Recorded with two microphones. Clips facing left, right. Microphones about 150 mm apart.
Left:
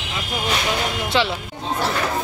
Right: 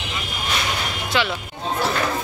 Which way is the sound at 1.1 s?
30° left (ahead or behind).